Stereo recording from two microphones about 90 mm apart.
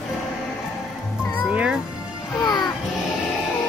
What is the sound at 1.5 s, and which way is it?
Music, 10° right (ahead or behind).